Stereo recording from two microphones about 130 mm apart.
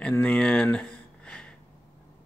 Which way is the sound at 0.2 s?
10° left (ahead or behind).